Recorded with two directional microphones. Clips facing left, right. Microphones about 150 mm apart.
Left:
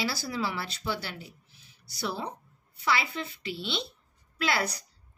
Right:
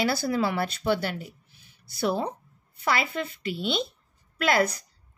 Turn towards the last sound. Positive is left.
turn(degrees=-50)  # may be behind; listen again after turning